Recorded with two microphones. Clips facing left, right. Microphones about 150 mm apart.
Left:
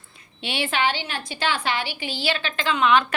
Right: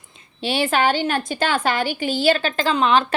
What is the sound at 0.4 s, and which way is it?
A woman's voice, 40° right (ahead or behind).